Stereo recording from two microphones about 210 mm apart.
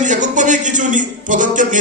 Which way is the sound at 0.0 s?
35° right (ahead or behind).